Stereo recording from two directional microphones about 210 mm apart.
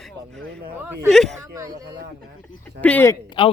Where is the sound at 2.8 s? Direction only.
10° left (ahead or behind).